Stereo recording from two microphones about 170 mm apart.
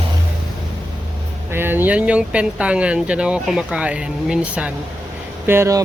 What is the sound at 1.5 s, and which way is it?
Speech, 10° right (ahead or behind).